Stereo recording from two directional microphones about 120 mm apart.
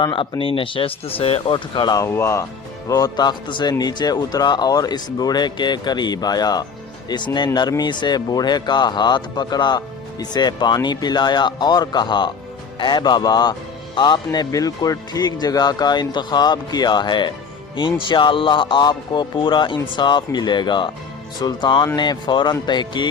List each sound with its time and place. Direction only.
0.0 s speech: 45° left (ahead or behind)
2.0 s speech: 20° left (ahead or behind); by 23.0 s 40° left (ahead or behind)